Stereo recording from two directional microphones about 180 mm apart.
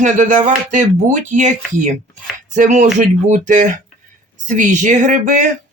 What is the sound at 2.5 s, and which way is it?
Speech, 40° right (ahead or behind).